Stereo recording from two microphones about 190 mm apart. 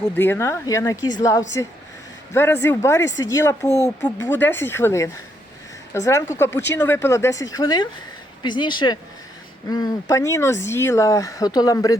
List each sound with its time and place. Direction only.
0.0 s speech: 10° left (ahead or behind)